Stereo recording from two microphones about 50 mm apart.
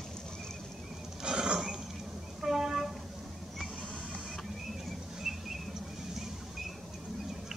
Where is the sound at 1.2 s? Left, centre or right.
Centre.